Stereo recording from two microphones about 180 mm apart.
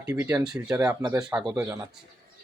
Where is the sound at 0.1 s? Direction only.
15° right (ahead or behind).